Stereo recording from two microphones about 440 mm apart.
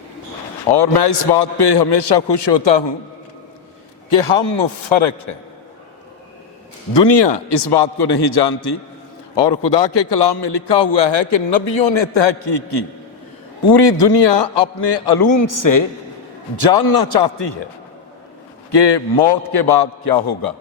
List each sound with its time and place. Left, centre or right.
0.7 s a man's voice: left
4.2 s a man's voice: left
6.9 s a man's voice: left
9.3 s a man's voice: left
15.4 s a man's voice: left
16.7 s a man's voice: left
18.7 s a man's voice: left